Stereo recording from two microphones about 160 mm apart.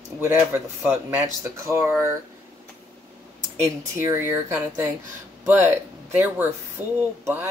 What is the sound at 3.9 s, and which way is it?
Speech, 15° right (ahead or behind).